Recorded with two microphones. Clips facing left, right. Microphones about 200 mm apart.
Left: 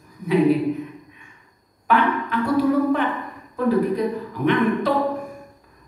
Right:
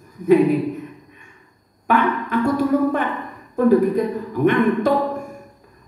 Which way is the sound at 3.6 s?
50° right (ahead or behind).